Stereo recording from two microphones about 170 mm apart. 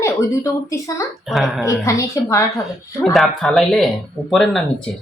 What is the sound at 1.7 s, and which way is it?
Speech, 20° left (ahead or behind).